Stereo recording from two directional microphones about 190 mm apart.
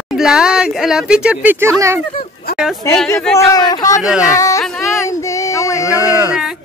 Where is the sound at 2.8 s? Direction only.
15° left (ahead or behind).